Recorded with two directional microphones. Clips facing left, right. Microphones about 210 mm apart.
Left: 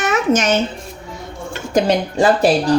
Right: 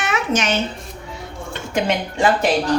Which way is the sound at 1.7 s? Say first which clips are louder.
Left 5 dB; 40° left (ahead or behind).